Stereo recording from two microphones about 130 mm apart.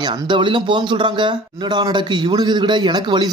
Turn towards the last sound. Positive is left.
turn(degrees=-35)  # may be behind; listen again after turning